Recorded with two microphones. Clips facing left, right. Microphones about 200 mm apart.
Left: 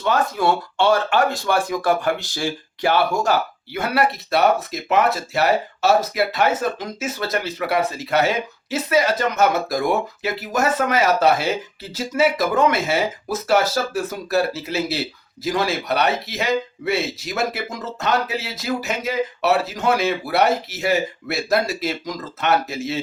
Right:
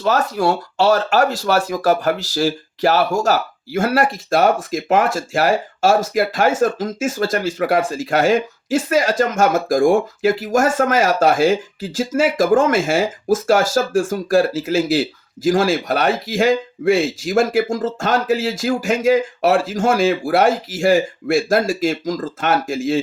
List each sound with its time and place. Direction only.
0.0 s speech: 40° right (ahead or behind)